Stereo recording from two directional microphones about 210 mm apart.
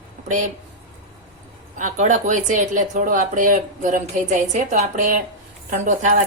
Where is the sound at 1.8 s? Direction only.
35° right (ahead or behind).